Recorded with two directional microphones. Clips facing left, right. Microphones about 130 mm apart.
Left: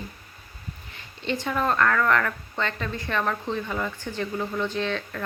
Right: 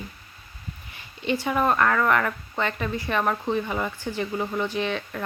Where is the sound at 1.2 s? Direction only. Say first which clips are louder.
Right 3 dB; 10° right (ahead or behind).